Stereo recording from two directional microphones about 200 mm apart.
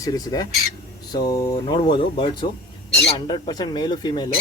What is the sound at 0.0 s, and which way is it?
Speech, 15° left (ahead or behind).